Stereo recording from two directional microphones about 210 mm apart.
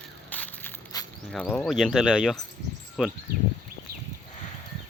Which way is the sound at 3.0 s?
Centre (ahead or behind).